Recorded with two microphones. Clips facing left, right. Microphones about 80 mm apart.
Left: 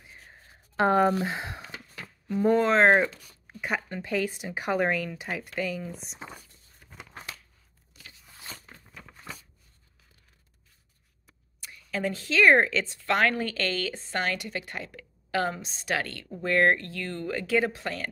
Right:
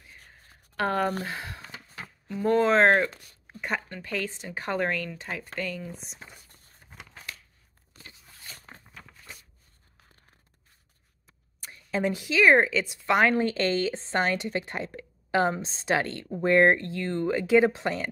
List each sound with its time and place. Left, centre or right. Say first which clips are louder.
0.3 s a sound: left 2 dB; left
2.2 s speech: left 3 dB; centre
2.5 s speech: right 1 dB; centre
3.6 s speech: left 1 dB; centre
9.0 s a sound: left 2 dB; centre
11.9 s speech: right 3 dB; centre
12.4 s speech: even; centre; by 18.0 s right